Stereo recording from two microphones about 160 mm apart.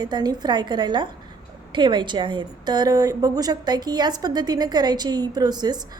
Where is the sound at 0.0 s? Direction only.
25° right (ahead or behind).